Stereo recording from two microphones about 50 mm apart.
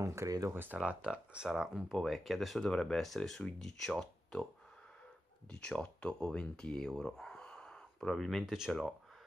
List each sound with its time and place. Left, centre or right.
0.0 s speech: right
0.8 s speech: right; by 4.5 s centre
5.5 s speech: centre
7.3 s a sound: centre
8.5 s speech: centre